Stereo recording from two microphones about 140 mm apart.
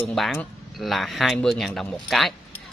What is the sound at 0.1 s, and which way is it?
Speech, centre (ahead or behind).